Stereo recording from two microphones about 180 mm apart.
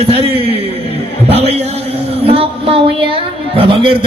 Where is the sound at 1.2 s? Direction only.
35° right (ahead or behind).